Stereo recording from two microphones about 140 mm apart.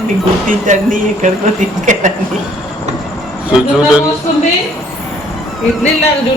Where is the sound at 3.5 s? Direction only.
5° right (ahead or behind).